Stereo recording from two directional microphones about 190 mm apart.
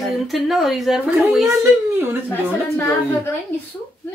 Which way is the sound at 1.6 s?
15° right (ahead or behind).